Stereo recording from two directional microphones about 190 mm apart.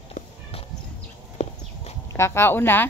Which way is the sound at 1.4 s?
35° left (ahead or behind).